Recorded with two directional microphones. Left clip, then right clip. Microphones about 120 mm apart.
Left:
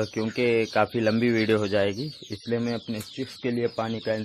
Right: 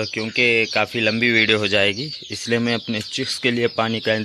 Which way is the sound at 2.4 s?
35° right (ahead or behind).